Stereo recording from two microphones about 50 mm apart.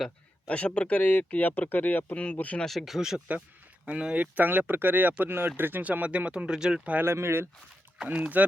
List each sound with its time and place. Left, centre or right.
0.4 s speech: left
2.6 s speech: centre
3.8 s speech: right
4.2 s speech: right
5.2 s speech: right
5.8 s speech: right
7.0 s speech: right
8.0 s speech: right